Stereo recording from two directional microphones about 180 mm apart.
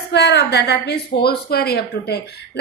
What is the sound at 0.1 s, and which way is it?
A woman's voice, 70° left (ahead or behind).